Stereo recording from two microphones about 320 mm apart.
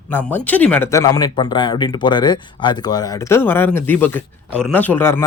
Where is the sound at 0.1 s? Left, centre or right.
Centre.